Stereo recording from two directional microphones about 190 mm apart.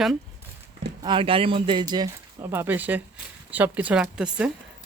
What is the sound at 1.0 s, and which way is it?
Speech, 25° right (ahead or behind).